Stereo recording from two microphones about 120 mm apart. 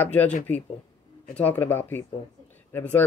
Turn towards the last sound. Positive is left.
turn(degrees=15)  # may be behind; listen again after turning